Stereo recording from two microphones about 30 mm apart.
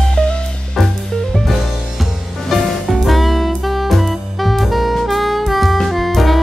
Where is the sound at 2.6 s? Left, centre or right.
Centre.